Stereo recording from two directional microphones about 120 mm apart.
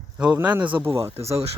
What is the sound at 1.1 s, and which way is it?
Speech, 60° right (ahead or behind).